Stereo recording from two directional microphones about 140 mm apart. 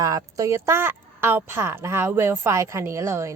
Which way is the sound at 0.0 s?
25° right (ahead or behind).